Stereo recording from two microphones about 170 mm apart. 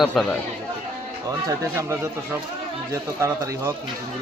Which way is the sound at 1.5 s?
15° right (ahead or behind).